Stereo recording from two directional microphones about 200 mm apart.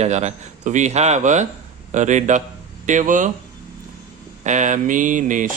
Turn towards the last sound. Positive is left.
turn(degrees=-40)  # may be behind; listen again after turning